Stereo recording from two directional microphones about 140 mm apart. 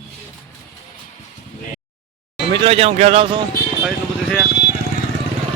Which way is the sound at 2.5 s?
40° right (ahead or behind).